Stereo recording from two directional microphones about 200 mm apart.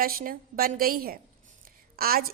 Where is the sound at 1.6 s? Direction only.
50° right (ahead or behind).